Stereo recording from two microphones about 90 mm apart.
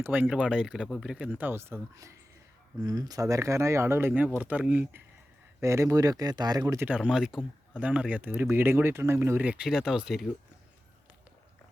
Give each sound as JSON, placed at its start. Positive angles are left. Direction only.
{"t": 0.0, "sound": "speech", "side_deg": -20}
{"t": 0.3, "sound": "speech", "side_deg": -10}
{"t": 1.4, "sound": "speech", "side_deg": -25}
{"t": 2.8, "sound": "speech", "side_deg": -45}
{"t": 5.5, "sound": "speech", "side_deg": -35}
{"t": 6.8, "sound": "speech", "side_deg": -10}
{"t": 9.4, "sound": "speech", "side_deg": -10}